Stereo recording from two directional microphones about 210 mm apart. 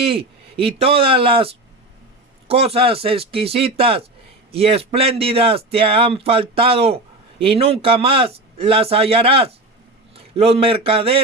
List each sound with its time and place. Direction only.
0.0 s a man's voice: 25° right (ahead or behind)